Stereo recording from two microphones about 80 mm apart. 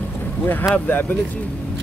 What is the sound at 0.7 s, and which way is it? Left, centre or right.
Speech, left.